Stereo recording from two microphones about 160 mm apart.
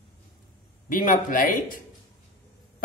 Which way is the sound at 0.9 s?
60° left (ahead or behind).